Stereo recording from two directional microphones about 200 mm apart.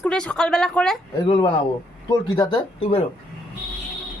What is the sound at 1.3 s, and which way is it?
Speech, 25° left (ahead or behind).